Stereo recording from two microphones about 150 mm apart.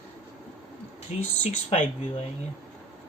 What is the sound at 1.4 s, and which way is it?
Speech, 45° left (ahead or behind).